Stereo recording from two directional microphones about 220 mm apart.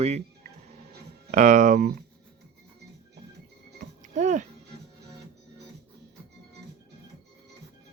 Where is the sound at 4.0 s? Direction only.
35° right (ahead or behind).